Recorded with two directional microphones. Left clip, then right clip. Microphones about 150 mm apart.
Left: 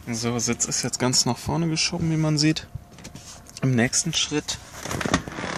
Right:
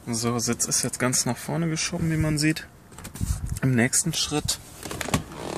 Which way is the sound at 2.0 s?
15° left (ahead or behind).